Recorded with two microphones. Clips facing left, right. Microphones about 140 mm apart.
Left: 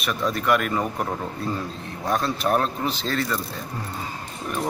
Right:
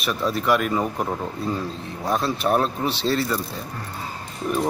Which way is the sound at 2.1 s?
5° right (ahead or behind).